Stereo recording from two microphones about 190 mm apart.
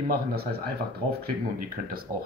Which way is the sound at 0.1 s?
55° right (ahead or behind).